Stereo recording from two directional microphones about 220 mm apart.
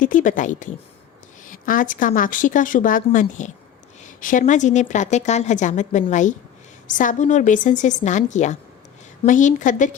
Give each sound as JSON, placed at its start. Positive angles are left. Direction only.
{"t": 0.0, "sound": "a woman's voice", "side_deg": 35}